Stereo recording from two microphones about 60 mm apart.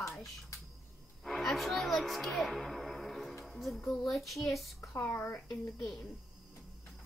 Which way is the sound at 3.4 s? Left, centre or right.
Centre.